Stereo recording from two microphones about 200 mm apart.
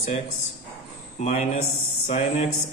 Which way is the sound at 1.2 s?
35° left (ahead or behind).